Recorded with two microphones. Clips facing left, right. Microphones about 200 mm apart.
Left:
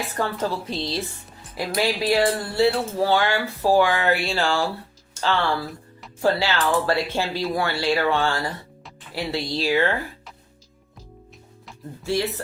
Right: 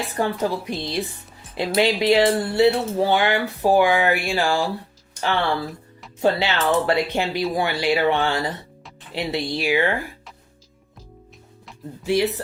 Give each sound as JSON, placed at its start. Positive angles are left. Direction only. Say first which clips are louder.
{"t": 0.2, "sound": "speech", "louder": "right 3 dB", "side_deg": -15}
{"t": 12.0, "sound": "speech", "louder": "right 4 dB", "side_deg": -15}